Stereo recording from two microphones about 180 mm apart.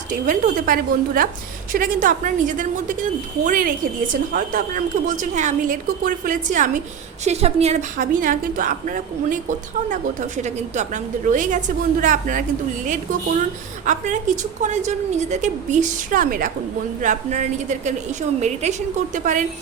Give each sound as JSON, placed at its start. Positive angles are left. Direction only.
{"t": 0.1, "sound": "a woman's voice", "side_deg": -50}
{"t": 7.3, "sound": "a woman's voice", "side_deg": -35}
{"t": 13.8, "sound": "a woman's voice", "side_deg": -45}